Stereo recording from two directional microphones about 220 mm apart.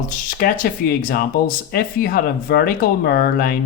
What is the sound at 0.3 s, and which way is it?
Speech, 40° left (ahead or behind).